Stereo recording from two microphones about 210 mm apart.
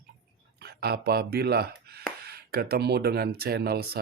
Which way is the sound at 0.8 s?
50° right (ahead or behind).